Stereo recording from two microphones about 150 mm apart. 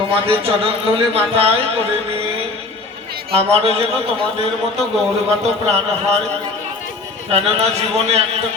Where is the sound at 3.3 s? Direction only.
40° right (ahead or behind).